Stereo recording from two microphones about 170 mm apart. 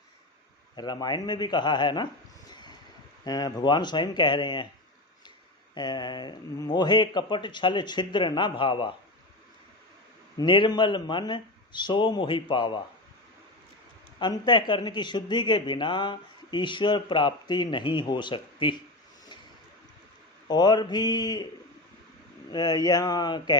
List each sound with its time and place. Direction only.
0.8 s speech: 25° left (ahead or behind)
2.5 s vehicle: 25° left (ahead or behind)
3.2 s speech: 20° left (ahead or behind)
5.7 s speech: 25° left (ahead or behind)
10.3 s speech: 30° left (ahead or behind)
14.2 s speech: 25° left (ahead or behind)
20.5 s speech: 25° left (ahead or behind)
22.5 s speech: 25° left (ahead or behind)